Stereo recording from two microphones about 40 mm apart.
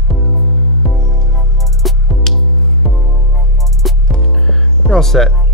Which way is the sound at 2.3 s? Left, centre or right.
Centre.